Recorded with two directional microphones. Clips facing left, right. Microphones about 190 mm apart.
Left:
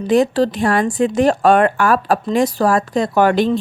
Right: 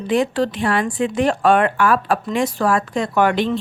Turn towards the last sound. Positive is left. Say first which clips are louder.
# left 3 dB
turn(degrees=40)  # may be behind; listen again after turning